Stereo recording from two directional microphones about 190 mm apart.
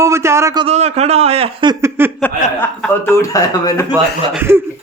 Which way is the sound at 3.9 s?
10° right (ahead or behind).